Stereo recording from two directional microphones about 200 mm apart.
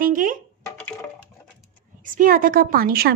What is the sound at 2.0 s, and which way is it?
A woman's voice, 45° right (ahead or behind).